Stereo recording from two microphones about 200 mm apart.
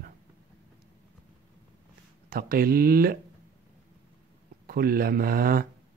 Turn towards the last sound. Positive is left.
turn(degrees=-45)  # may be behind; listen again after turning